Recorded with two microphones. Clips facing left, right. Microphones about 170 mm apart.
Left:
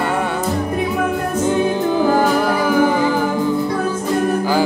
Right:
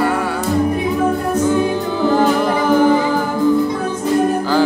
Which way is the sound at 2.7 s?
10° left (ahead or behind).